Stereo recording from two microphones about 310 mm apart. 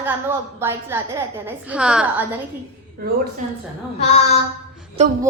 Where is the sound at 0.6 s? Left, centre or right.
Centre.